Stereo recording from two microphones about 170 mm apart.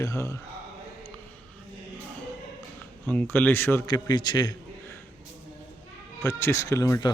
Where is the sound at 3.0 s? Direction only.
10° left (ahead or behind).